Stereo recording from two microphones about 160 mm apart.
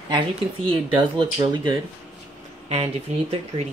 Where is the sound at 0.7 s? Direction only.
30° right (ahead or behind).